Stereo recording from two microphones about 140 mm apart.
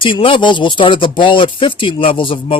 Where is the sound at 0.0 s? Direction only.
40° left (ahead or behind).